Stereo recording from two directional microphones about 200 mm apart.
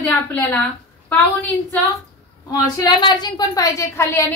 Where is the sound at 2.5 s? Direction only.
20° left (ahead or behind).